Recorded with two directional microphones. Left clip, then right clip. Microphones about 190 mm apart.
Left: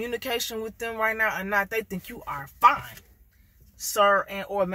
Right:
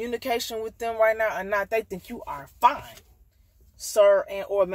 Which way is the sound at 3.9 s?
15° left (ahead or behind).